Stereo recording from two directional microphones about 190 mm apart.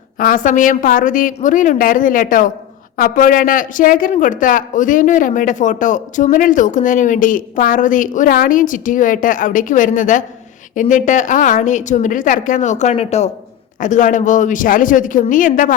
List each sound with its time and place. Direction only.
0.2 s a man's voice: 45° left (ahead or behind)